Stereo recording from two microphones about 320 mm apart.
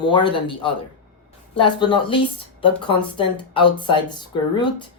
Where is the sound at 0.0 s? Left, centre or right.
Centre.